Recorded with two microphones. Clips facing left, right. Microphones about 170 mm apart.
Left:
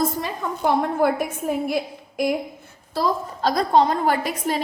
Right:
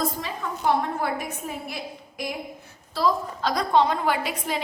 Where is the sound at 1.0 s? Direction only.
50° left (ahead or behind).